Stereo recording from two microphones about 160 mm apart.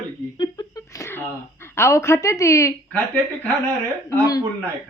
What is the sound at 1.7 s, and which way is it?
Speech, 15° left (ahead or behind).